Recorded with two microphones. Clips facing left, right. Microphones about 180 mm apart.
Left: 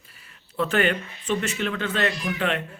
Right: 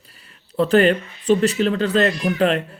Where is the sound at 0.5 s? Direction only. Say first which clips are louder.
Right 8 dB; 35° right (ahead or behind).